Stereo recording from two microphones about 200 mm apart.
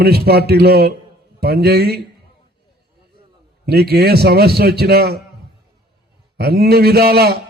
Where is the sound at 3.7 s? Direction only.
50° right (ahead or behind).